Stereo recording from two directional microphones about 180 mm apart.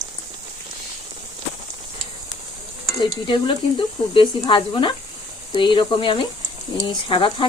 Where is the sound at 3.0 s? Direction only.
25° left (ahead or behind).